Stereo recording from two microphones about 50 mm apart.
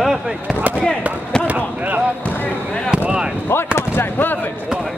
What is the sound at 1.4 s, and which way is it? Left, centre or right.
Speech, right.